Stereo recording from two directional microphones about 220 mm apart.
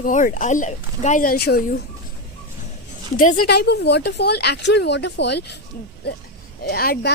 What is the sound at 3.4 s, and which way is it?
Speech, 90° left.